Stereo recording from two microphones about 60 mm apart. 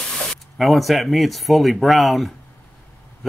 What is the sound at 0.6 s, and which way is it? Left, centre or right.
Speech, centre.